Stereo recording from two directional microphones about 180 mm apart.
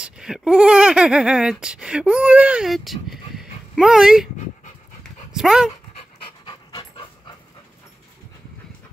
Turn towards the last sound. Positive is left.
turn(degrees=25)  # may be behind; listen again after turning